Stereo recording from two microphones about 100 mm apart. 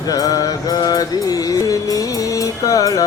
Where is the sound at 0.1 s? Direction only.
40° left (ahead or behind).